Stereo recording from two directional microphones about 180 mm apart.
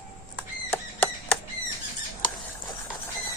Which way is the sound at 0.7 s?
10° left (ahead or behind).